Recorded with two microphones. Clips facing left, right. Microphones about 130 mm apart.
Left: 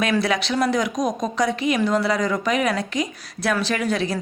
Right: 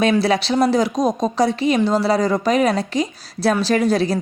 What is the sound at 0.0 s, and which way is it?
Speech, 30° right (ahead or behind).